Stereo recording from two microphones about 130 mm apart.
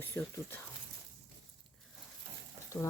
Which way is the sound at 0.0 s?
15° left (ahead or behind).